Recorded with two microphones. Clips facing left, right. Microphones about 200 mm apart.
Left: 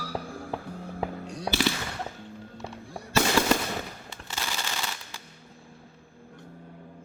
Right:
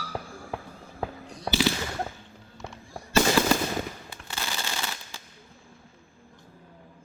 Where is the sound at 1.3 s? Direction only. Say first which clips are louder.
Right 3 dB; 70° left (ahead or behind).